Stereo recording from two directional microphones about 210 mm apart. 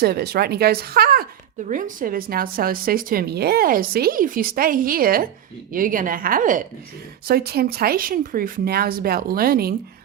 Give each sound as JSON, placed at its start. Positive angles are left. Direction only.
{"t": 0.0, "sound": "a woman's voice", "side_deg": -50}